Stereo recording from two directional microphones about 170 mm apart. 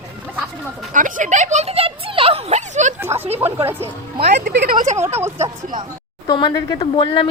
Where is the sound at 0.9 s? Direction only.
50° right (ahead or behind).